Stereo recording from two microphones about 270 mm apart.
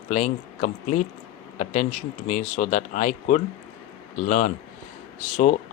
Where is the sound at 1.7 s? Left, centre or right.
Left.